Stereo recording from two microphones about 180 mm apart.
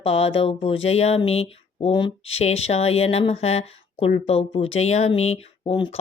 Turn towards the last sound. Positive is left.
turn(degrees=30)  # may be behind; listen again after turning